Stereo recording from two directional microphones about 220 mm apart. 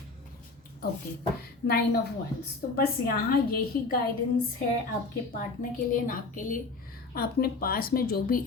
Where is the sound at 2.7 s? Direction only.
45° left (ahead or behind).